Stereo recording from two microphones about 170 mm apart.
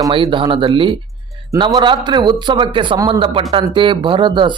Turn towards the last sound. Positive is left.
turn(degrees=-30)  # may be behind; listen again after turning